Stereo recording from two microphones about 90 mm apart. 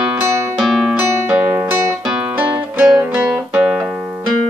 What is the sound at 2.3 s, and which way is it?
Music, 10° right (ahead or behind).